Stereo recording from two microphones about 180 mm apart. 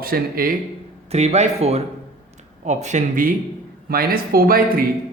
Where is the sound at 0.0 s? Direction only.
55° right (ahead or behind).